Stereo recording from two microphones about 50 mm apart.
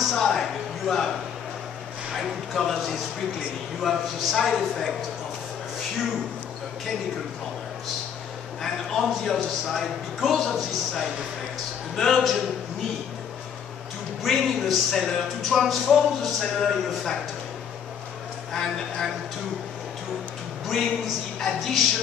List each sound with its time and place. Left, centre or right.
0.0 s a sound: centre
2.1 s speech: centre
8.6 s speech: centre
11.9 s speech: centre
14.2 s speech: centre
18.5 s speech: centre
20.6 s speech: centre